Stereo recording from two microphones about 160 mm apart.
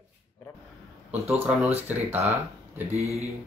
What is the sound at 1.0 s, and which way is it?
Speech, 10° right (ahead or behind).